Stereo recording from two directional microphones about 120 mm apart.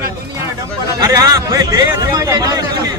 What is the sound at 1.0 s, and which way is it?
Speech, 30° right (ahead or behind).